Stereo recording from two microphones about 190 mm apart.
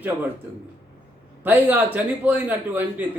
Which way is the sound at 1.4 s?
10° right (ahead or behind).